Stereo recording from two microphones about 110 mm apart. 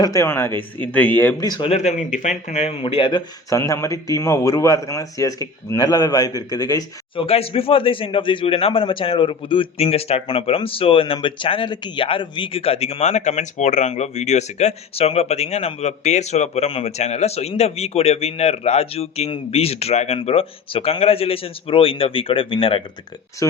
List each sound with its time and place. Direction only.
0.0 s a man's voice: 30° left (ahead or behind)
1.4 s a man's voice: 35° left (ahead or behind)
1.7 s a man's voice: 90° left
2.8 s speech: 55° left (ahead or behind)
3.5 s a man's voice: 25° left (ahead or behind)
7.2 s speech: 60° left (ahead or behind)
20.1 s speech: 60° left (ahead or behind)
23.4 s a man's voice: 30° left (ahead or behind)